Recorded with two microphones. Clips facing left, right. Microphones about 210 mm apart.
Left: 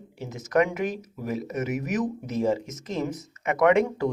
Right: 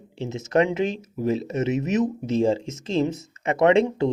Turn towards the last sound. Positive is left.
turn(degrees=-25)  # may be behind; listen again after turning